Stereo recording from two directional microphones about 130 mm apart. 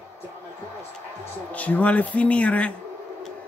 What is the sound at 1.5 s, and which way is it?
Speech, 10° left (ahead or behind).